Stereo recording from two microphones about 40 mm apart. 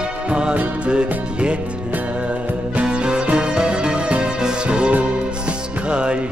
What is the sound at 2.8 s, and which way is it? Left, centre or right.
Music, right.